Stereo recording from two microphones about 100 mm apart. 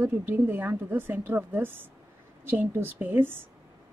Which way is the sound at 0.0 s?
20° right (ahead or behind).